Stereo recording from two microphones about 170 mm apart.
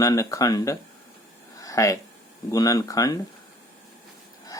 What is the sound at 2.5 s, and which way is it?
Speech, 20° left (ahead or behind).